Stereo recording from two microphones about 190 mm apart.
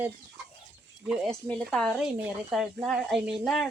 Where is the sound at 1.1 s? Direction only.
5° left (ahead or behind).